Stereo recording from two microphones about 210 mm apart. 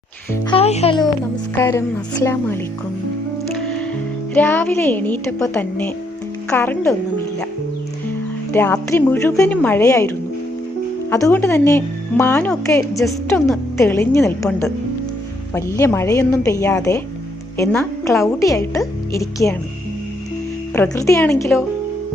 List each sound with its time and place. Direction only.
0.4 s a child's voice: 30° left (ahead or behind); by 2.6 s 10° left (ahead or behind)
4.4 s speech: 10° left (ahead or behind)
8.5 s speech: 10° left (ahead or behind)
11.1 s speech: 10° left (ahead or behind)
20.7 s speech: 15° left (ahead or behind)